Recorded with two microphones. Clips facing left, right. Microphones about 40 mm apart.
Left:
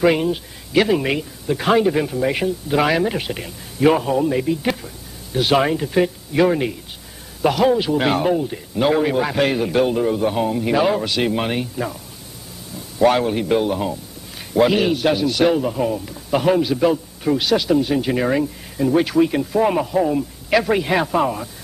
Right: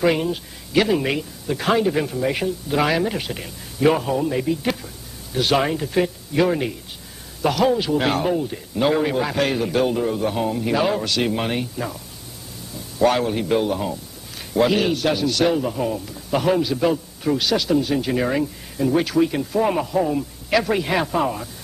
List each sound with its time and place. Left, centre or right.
0.0 s speech: centre
13.0 s speech: centre